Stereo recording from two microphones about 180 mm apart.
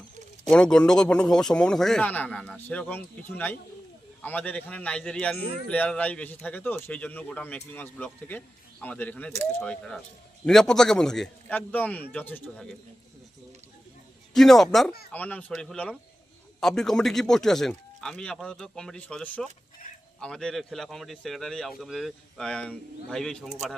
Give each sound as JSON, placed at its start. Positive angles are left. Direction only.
{"t": 0.5, "sound": "speech", "side_deg": 5}
{"t": 14.3, "sound": "speech", "side_deg": 0}